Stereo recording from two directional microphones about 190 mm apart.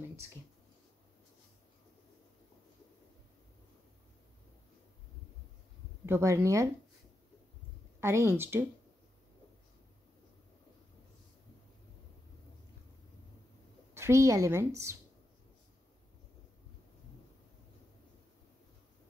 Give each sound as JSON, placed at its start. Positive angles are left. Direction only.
{"t": 6.0, "sound": "a woman's voice", "side_deg": -15}
{"t": 8.0, "sound": "a woman's voice", "side_deg": -15}
{"t": 13.9, "sound": "a woman's voice", "side_deg": -15}